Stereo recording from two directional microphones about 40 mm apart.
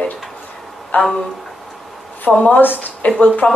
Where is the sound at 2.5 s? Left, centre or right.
Left.